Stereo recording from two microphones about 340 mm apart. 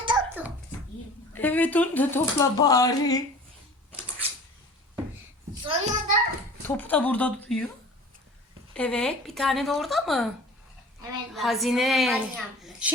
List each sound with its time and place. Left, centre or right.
0.0 s a sound: centre
1.3 s speech: centre
5.6 s a sound: centre
6.7 s speech: centre
8.7 s speech: centre
11.3 s speech: centre